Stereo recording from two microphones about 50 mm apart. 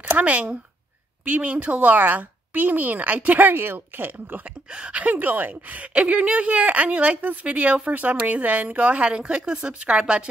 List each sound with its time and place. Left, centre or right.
0.0 s speech: right
4.6 s speech: right